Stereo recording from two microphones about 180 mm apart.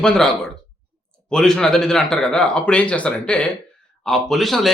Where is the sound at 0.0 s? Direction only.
5° left (ahead or behind).